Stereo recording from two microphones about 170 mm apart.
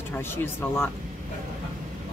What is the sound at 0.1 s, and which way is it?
Speech, 15° left (ahead or behind).